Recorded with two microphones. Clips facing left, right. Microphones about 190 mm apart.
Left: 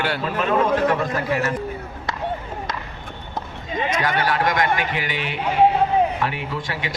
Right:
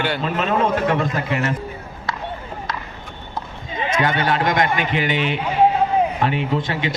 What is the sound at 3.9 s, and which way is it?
A man's voice, 25° right (ahead or behind).